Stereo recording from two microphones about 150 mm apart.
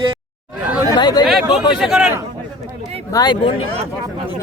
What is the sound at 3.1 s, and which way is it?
Speech, 30° left (ahead or behind).